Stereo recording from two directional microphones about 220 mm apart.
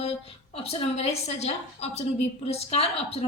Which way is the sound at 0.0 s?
25° left (ahead or behind).